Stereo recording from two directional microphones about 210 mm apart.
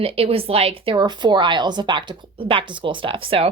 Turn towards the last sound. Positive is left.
turn(degrees=-25)  # may be behind; listen again after turning